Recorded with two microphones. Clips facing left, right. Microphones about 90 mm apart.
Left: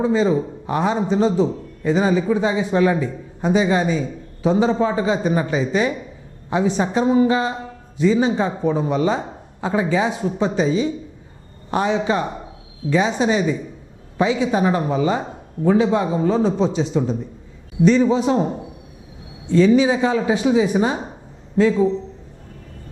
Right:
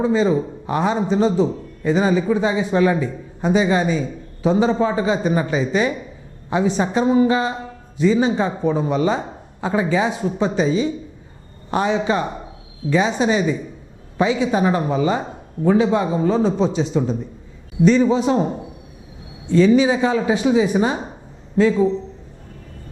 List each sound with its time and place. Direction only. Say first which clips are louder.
0.0 s a man's voice: even; 20° right (ahead or behind)